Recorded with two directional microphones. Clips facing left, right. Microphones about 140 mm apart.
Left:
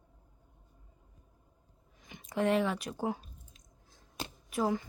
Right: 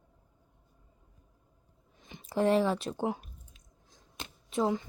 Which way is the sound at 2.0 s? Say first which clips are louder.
Right 3 dB; 30° right (ahead or behind).